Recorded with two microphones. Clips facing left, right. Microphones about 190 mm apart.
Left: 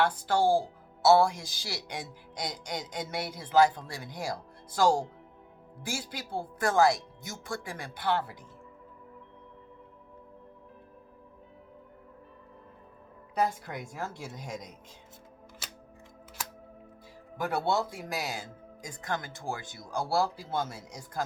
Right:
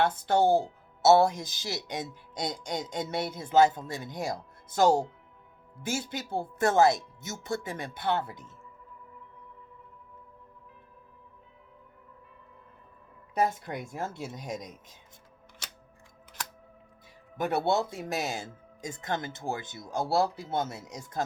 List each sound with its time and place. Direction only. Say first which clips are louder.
0.0 s speech: right 2 dB; 25° right (ahead or behind)
13.3 s speech: right 2 dB; 25° right (ahead or behind)
17.3 s speech: right 2 dB; 20° right (ahead or behind)